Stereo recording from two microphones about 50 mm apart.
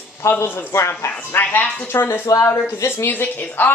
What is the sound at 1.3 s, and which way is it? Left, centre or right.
Speech, left.